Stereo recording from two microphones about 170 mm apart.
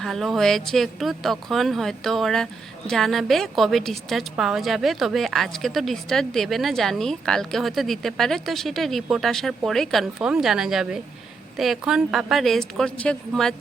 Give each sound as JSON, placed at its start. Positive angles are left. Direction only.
{"t": 0.0, "sound": "speech", "side_deg": 0}